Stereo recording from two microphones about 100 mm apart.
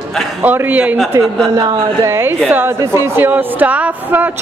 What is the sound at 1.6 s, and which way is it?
Speech, 60° right (ahead or behind).